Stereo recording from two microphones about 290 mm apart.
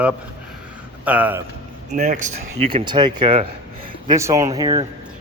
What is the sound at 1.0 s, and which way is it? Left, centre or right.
Speech, centre.